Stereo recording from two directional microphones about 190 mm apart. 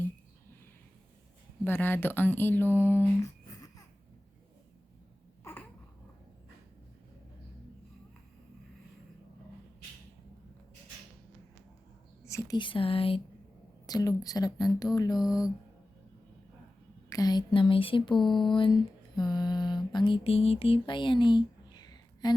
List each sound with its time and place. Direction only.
1.6 s speech: 10° left (ahead or behind)
5.4 s babbling: 15° left (ahead or behind)
12.2 s a woman's voice: 15° left (ahead or behind)
17.1 s a woman's voice: 20° left (ahead or behind)
18.2 s a sound: centre (ahead or behind)
18.4 s a sound: 25° left (ahead or behind)